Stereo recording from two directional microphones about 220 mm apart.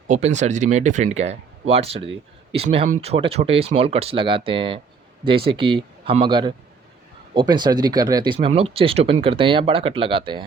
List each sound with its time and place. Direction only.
0.1 s speech: 30° right (ahead or behind)